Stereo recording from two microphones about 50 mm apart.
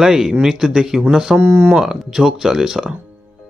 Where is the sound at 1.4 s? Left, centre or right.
Right.